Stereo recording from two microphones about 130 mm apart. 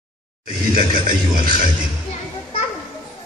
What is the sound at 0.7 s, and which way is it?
Music, 90° right.